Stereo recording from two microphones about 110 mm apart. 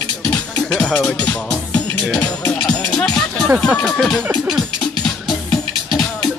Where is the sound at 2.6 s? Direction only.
5° left (ahead or behind).